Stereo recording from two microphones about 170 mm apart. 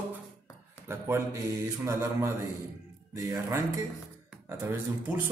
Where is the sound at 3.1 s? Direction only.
20° right (ahead or behind).